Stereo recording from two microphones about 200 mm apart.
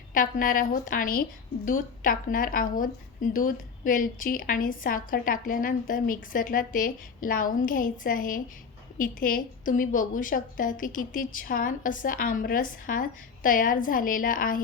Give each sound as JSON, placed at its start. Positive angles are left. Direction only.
{"t": 0.1, "sound": "a woman's voice", "side_deg": 45}